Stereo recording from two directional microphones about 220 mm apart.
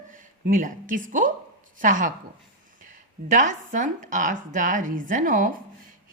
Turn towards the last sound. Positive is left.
turn(degrees=-35)  # may be behind; listen again after turning